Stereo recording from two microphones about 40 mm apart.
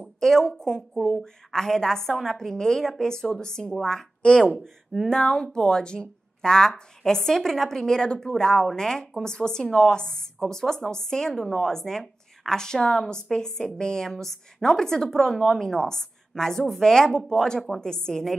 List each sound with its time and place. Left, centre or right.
0.0 s a woman's voice: centre
4.2 s a woman's voice: left